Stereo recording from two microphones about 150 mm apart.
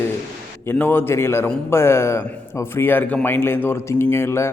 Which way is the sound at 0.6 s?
15° left (ahead or behind).